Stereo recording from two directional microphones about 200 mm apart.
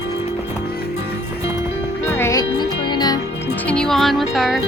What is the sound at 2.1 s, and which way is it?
Music, 10° left (ahead or behind).